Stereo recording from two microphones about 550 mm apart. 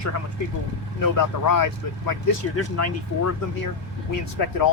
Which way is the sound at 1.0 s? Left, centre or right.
Left.